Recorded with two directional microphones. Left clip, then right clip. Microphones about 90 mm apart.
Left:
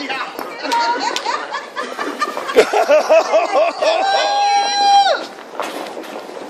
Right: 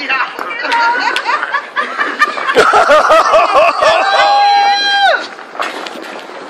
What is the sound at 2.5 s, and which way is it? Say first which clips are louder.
Snicker: right 5 dB; 25° left (ahead or behind).